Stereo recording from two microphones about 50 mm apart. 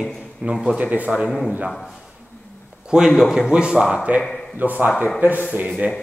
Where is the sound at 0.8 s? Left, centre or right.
Right.